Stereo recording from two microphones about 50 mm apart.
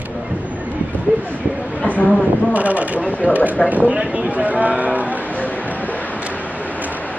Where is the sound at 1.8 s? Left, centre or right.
Left.